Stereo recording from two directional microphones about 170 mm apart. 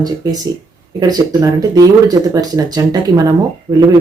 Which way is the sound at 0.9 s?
20° right (ahead or behind).